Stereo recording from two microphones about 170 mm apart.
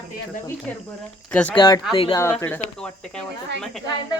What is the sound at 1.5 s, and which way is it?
Speech, 25° left (ahead or behind).